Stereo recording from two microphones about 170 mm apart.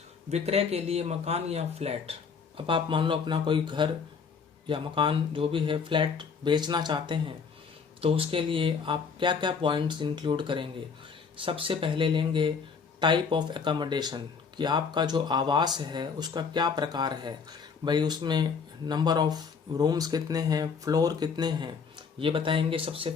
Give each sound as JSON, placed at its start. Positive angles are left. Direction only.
{"t": 0.3, "sound": "speech", "side_deg": -40}